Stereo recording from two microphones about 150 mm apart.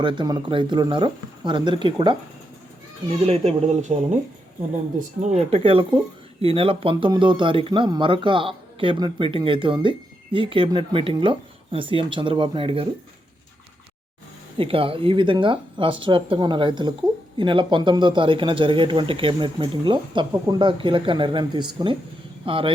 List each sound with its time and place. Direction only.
0.0 s speech: 30° right (ahead or behind)
14.6 s speech: 35° right (ahead or behind)